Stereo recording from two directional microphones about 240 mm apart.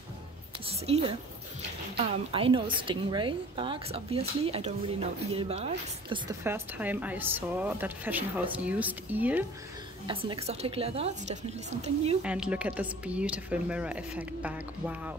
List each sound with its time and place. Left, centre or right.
0.7 s a woman's voice: right
6.4 s speech: centre
10.0 s a woman's voice: right
12.2 s speech: centre